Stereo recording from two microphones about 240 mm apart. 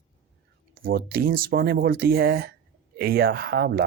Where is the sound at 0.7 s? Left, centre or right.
Right.